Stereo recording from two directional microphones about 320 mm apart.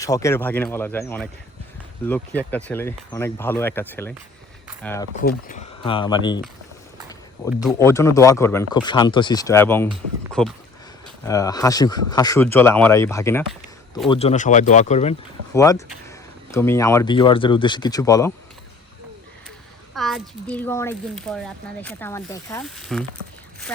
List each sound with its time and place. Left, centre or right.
0.0 s speech: centre
5.2 s speech: left
7.6 s speech: centre
14.1 s speech: centre
15.5 s speech: centre
19.9 s speech: centre